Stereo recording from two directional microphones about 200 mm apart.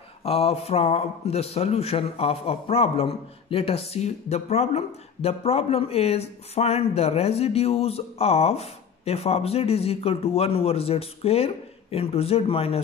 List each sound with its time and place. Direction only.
0.2 s a man's voice: 30° left (ahead or behind)